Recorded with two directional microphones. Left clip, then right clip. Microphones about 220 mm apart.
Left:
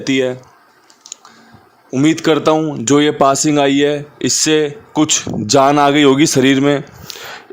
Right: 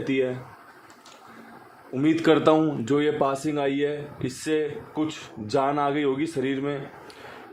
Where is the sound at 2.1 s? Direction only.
30° left (ahead or behind).